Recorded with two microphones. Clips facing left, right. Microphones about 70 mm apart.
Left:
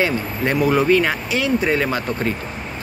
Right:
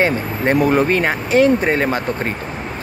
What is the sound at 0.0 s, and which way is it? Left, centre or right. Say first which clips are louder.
Speech: right 3 dB; right.